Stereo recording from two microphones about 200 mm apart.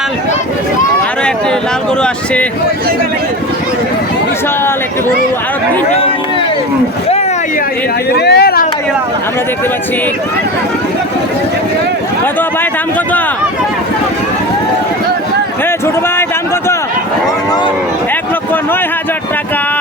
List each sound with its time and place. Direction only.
2.0 s speech: 5° left (ahead or behind)
8.1 s speech: 55° left (ahead or behind)